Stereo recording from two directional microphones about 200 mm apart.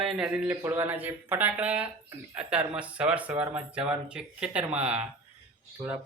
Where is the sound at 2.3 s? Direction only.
5° right (ahead or behind).